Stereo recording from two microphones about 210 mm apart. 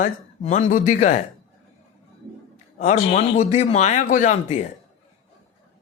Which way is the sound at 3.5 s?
35° left (ahead or behind).